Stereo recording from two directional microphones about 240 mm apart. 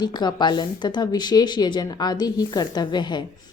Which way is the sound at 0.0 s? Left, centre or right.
Centre.